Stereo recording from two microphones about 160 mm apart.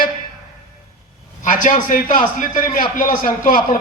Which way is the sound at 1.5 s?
55° left (ahead or behind).